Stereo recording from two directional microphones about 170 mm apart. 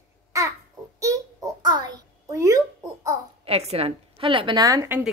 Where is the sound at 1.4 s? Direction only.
25° right (ahead or behind).